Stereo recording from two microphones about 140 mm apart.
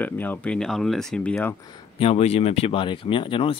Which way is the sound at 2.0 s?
45° left (ahead or behind).